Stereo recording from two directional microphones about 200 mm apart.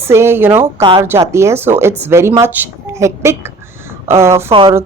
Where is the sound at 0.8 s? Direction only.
25° right (ahead or behind).